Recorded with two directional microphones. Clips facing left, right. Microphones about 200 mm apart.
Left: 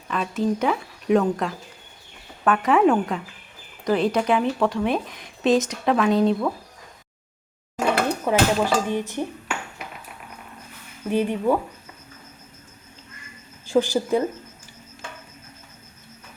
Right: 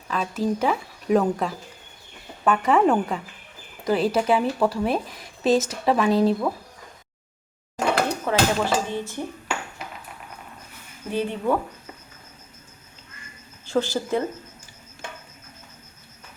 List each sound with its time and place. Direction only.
0.1 s speech: centre (ahead or behind)
8.2 s speech: 15° left (ahead or behind)
11.1 s speech: 15° left (ahead or behind)
13.7 s speech: 15° left (ahead or behind)